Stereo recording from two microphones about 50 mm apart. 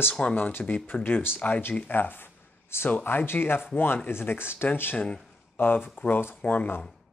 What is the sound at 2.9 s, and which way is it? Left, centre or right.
Speech, left.